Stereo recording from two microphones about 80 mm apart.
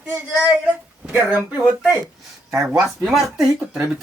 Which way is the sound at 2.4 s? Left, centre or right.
Right.